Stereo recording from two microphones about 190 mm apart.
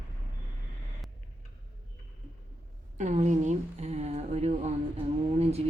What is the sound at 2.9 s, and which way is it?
Speech, 40° right (ahead or behind).